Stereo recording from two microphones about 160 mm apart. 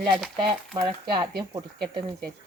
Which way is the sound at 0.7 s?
25° right (ahead or behind).